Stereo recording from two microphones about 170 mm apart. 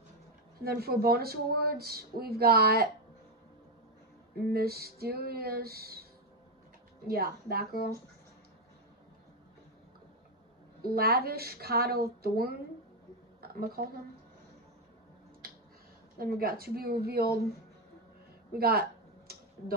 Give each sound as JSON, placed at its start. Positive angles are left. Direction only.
{"t": 0.6, "sound": "speech", "side_deg": -65}
{"t": 4.5, "sound": "speech", "side_deg": -65}
{"t": 7.1, "sound": "speech", "side_deg": -65}
{"t": 10.8, "sound": "speech", "side_deg": -65}
{"t": 13.4, "sound": "a sound", "side_deg": -60}
{"t": 16.2, "sound": "speech", "side_deg": -60}
{"t": 18.6, "sound": "a sound", "side_deg": -65}